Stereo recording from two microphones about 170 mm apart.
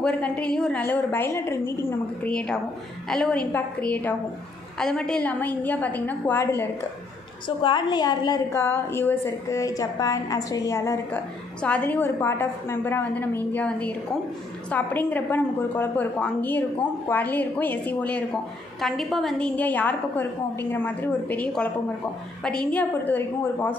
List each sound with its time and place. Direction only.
0.0 s a woman's voice: 5° left (ahead or behind)
7.4 s a woman's voice: 25° left (ahead or behind); by 23.8 s 10° left (ahead or behind)